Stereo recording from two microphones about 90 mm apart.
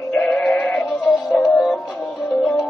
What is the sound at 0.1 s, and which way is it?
Music, 15° left (ahead or behind).